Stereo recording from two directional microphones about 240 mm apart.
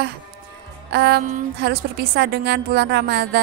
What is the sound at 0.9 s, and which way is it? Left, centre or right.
A woman's voice, right.